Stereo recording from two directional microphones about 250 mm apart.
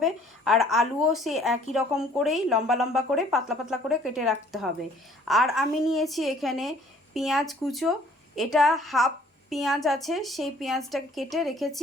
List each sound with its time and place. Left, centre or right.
0.0 s a woman's voice: centre